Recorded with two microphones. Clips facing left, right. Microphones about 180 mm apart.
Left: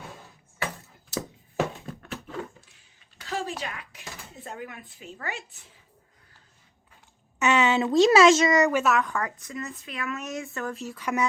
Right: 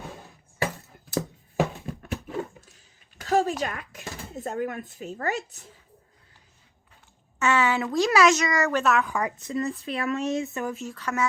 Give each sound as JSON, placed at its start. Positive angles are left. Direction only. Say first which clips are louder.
{"t": 1.5, "sound": "a sound", "louder": "right 2 dB", "side_deg": -15}
{"t": 2.6, "sound": "a sound", "louder": "right 4 dB", "side_deg": -40}
{"t": 3.6, "sound": "speech", "louder": "right 6 dB", "side_deg": -45}
{"t": 7.3, "sound": "a woman's voice", "louder": "left 1 dB", "side_deg": 20}
{"t": 8.7, "sound": "a woman's voice", "louder": "even", "side_deg": 5}
{"t": 9.0, "sound": "a woman's voice", "louder": "right 2 dB", "side_deg": -15}
{"t": 9.4, "sound": "speech", "louder": "right 8 dB", "side_deg": -30}
{"t": 10.7, "sound": "a woman's voice", "louder": "right 1 dB", "side_deg": 0}
{"t": 10.9, "sound": "speech", "louder": "left 2 dB", "side_deg": 15}